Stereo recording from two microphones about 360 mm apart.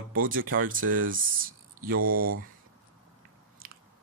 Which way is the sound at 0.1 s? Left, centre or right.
Right.